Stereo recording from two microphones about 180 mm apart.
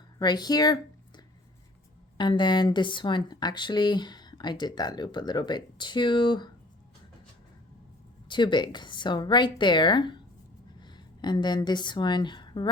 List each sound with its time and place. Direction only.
0.2 s speech: 25° left (ahead or behind)
8.3 s speech: 25° left (ahead or behind)